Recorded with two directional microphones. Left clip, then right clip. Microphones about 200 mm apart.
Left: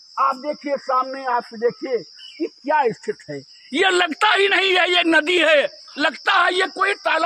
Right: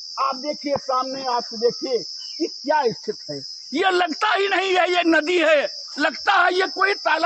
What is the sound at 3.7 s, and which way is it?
A man's voice, 45° left (ahead or behind).